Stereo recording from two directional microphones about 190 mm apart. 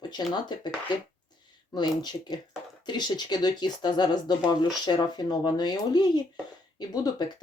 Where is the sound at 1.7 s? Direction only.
20° left (ahead or behind).